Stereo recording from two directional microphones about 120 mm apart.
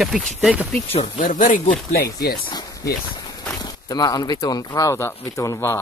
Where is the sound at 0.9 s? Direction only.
90° left.